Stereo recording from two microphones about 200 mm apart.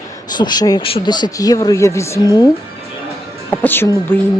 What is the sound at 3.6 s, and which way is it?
Speech, 10° left (ahead or behind).